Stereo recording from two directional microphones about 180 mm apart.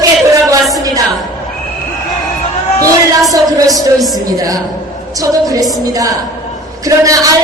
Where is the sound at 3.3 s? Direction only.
20° right (ahead or behind).